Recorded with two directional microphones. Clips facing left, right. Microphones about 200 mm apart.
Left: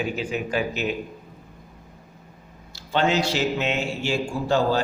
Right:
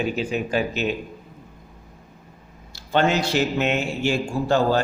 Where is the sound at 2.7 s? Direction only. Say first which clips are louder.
Right 2 dB; 50° right (ahead or behind).